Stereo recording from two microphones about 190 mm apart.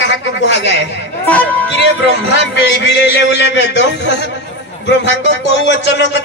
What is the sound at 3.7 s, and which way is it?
Speech, 65° left (ahead or behind).